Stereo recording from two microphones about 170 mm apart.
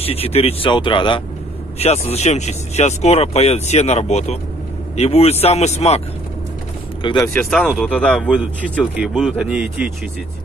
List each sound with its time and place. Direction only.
0.0 s speech: 35° left (ahead or behind)
7.3 s a man's voice: centre (ahead or behind)